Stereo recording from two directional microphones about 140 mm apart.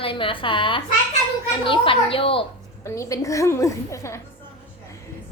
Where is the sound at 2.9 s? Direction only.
20° left (ahead or behind).